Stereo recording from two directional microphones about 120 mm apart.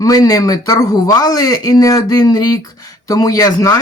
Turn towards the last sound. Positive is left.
turn(degrees=30)  # may be behind; listen again after turning